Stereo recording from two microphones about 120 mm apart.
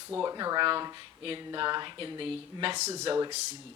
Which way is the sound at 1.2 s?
50° right (ahead or behind).